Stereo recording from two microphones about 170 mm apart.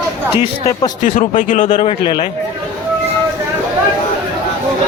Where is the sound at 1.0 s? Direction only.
50° left (ahead or behind).